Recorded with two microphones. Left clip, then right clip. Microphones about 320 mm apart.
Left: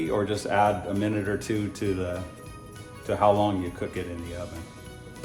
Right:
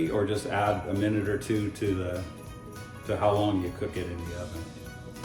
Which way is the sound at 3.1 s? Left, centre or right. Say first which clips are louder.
Left 4 dB; centre.